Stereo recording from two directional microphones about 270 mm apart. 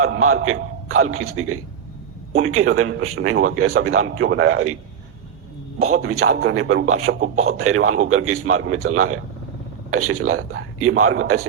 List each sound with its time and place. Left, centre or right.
0.0 s a man's voice: right
5.8 s a man's voice: right
6.3 s a man's voice: right